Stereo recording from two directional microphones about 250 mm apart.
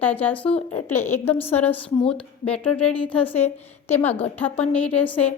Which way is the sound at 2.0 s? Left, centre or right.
Left.